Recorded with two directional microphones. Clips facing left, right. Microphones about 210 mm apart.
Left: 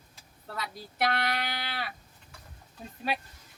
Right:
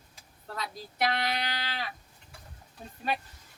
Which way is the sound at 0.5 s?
Centre (ahead or behind).